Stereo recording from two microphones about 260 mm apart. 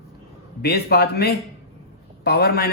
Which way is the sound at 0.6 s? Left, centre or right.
Left.